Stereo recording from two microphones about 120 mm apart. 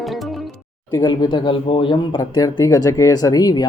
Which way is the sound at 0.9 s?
35° left (ahead or behind).